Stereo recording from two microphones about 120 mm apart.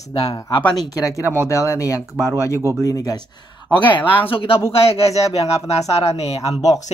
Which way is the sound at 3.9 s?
45° left (ahead or behind).